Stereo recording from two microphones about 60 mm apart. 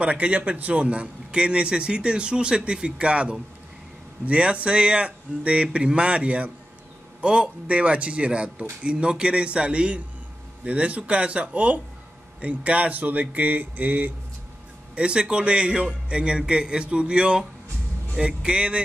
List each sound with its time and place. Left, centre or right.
0.0 s a man's voice: right
15.0 s a man's voice: centre